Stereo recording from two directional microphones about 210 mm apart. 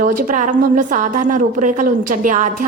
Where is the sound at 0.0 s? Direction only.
40° right (ahead or behind).